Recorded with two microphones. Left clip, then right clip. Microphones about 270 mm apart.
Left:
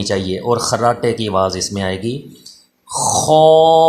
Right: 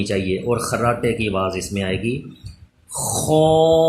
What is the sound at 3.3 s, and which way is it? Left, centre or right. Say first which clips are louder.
Speech: left 5 dB; centre.